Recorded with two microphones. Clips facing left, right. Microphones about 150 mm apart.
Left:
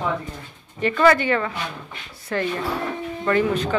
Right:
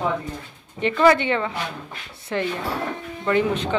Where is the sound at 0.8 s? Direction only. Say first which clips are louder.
Even; 20° right (ahead or behind).